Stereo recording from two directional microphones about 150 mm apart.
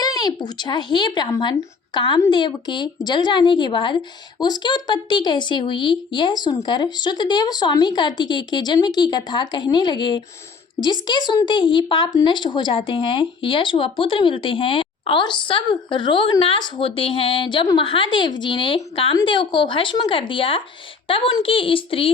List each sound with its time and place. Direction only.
0.0 s a woman's voice: 25° left (ahead or behind)